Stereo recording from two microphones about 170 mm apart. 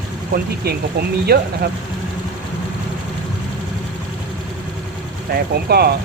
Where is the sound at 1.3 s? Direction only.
65° right (ahead or behind).